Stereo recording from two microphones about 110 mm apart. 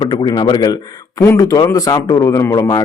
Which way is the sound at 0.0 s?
45° left (ahead or behind).